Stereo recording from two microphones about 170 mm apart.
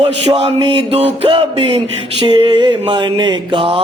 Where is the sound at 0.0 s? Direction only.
35° right (ahead or behind).